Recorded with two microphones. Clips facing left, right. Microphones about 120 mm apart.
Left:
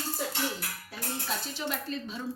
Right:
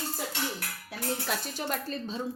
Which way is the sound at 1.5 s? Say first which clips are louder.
Right 1 dB; 45° right (ahead or behind).